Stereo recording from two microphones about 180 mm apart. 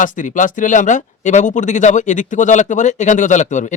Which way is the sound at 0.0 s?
45° left (ahead or behind).